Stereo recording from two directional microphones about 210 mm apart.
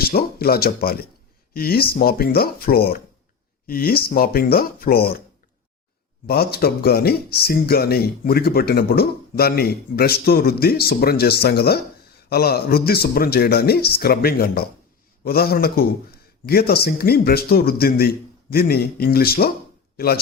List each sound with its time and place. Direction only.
0.0 s speech: 45° left (ahead or behind)
6.2 s speech: 45° left (ahead or behind)